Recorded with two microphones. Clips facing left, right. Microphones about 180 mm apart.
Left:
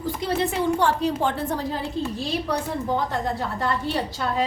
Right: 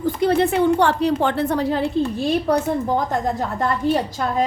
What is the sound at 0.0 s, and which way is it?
A woman's voice, 55° right (ahead or behind).